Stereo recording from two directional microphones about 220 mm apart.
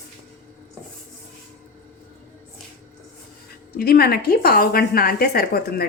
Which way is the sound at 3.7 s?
45° left (ahead or behind).